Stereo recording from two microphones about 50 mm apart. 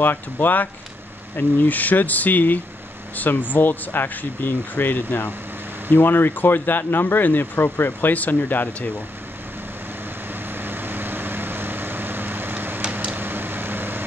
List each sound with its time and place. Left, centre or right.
0.0 s speech: left
10.6 s vehicle: right
13.1 s a sound: right